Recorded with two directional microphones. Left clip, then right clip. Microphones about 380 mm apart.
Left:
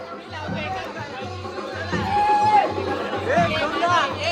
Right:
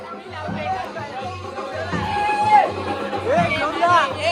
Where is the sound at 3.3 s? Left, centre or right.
Centre.